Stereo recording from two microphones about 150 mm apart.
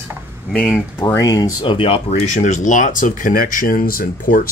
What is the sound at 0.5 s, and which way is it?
Speech, 5° left (ahead or behind).